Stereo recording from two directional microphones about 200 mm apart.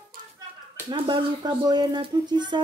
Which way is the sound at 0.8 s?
25° right (ahead or behind).